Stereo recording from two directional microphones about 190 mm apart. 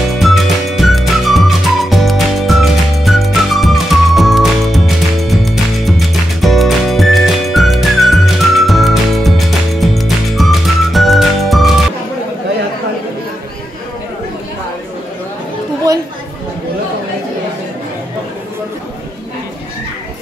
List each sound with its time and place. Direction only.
0.1 s music: centre (ahead or behind)
15.9 s chatter: 15° right (ahead or behind)